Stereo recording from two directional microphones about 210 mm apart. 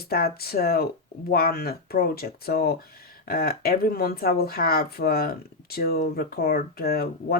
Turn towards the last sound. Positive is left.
turn(degrees=45)  # may be behind; listen again after turning